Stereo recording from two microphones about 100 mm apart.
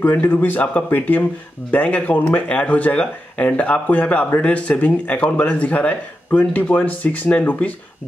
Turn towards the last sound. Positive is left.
turn(degrees=15)  # may be behind; listen again after turning